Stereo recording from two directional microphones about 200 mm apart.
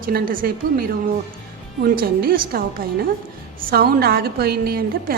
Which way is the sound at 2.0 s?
50° right (ahead or behind).